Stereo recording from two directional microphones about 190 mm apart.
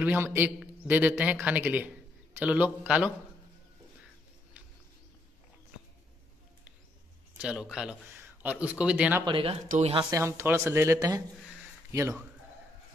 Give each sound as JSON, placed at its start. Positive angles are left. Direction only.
{"t": 0.0, "sound": "a man's voice", "side_deg": -10}
{"t": 7.3, "sound": "speech", "side_deg": -5}
{"t": 9.2, "sound": "a woman's voice", "side_deg": -30}
{"t": 10.0, "sound": "a man's voice", "side_deg": -15}